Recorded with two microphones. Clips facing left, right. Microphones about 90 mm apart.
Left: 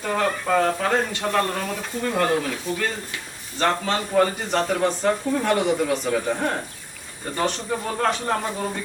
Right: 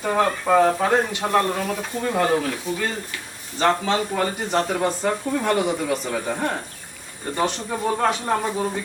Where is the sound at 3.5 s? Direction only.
5° right (ahead or behind).